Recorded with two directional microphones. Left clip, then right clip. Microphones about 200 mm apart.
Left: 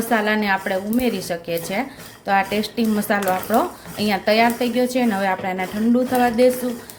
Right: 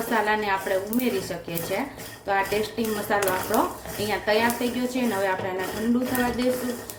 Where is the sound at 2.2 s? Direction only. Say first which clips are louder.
Left 5 dB; 50° left (ahead or behind).